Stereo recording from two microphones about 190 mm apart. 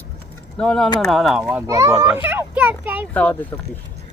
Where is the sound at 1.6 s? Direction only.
15° right (ahead or behind).